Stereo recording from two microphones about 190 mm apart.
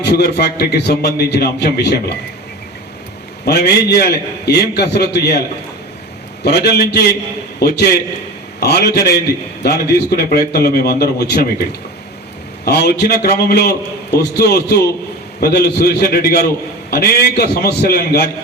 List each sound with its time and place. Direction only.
0.0 s a man's voice: 60° left (ahead or behind)
3.4 s a man's voice: 55° left (ahead or behind)
6.4 s a man's voice: 60° left (ahead or behind)
12.6 s a man's voice: 55° left (ahead or behind)